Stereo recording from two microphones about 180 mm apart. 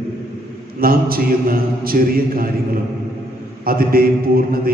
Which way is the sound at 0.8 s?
55° right (ahead or behind).